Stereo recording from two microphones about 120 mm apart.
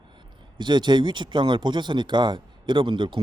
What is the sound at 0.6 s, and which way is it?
Speech, 40° right (ahead or behind).